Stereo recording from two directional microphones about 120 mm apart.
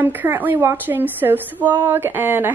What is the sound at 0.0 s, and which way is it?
A woman's voice, 15° right (ahead or behind).